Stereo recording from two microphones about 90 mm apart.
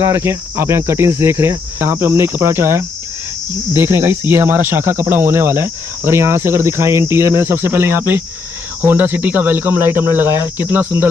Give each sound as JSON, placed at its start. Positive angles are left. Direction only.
{"t": 0.0, "sound": "speech", "side_deg": -30}